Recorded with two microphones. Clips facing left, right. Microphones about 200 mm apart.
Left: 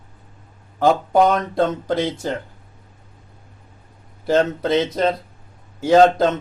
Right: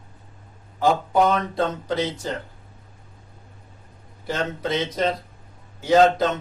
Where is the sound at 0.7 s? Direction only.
55° left (ahead or behind).